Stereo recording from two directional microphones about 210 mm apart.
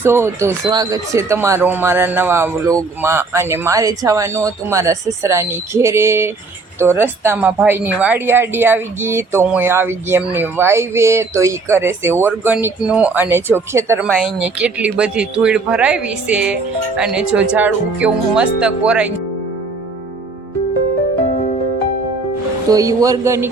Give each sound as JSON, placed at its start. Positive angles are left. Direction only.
{"t": 0.0, "sound": "speech", "side_deg": -10}
{"t": 14.1, "sound": "speech", "side_deg": 5}
{"t": 22.7, "sound": "speech", "side_deg": -15}